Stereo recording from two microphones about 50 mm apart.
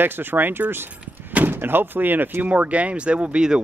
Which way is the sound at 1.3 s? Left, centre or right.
Right.